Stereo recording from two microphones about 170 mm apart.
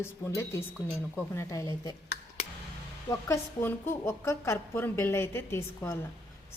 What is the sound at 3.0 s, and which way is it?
Speech, 15° left (ahead or behind).